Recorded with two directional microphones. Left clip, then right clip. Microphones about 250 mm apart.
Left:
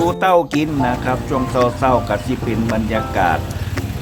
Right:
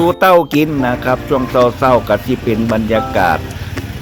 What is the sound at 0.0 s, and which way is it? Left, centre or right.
Speech, centre.